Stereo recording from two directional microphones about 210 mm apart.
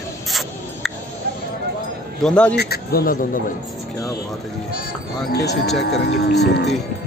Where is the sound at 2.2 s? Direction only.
5° left (ahead or behind).